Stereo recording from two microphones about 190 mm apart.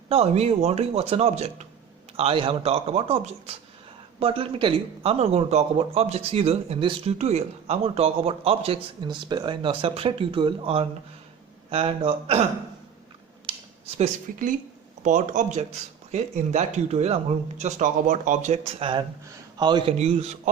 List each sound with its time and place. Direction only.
0.1 s speech: 35° right (ahead or behind)
13.5 s a sound: 25° right (ahead or behind)
13.9 s speech: 40° right (ahead or behind); by 19.9 s 25° right (ahead or behind)
20.0 s speech: 35° right (ahead or behind)